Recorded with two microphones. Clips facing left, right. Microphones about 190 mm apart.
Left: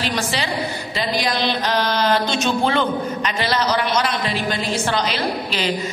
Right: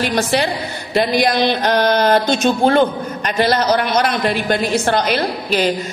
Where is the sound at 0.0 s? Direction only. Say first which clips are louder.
Right 6 dB; 55° right (ahead or behind).